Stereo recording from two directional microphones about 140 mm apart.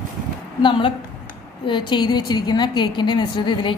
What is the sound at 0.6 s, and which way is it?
A woman's voice, 35° left (ahead or behind).